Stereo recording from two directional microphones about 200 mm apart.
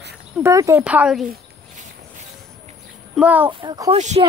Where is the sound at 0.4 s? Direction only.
15° right (ahead or behind).